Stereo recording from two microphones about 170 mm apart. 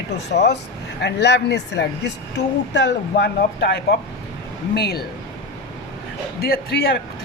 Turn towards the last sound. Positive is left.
turn(degrees=65)  # may be behind; listen again after turning